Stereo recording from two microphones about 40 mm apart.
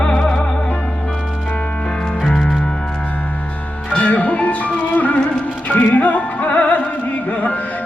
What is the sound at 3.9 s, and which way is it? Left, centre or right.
Music, left.